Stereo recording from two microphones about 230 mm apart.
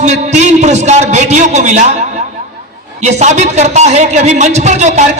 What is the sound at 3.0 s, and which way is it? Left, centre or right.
A man's voice, right.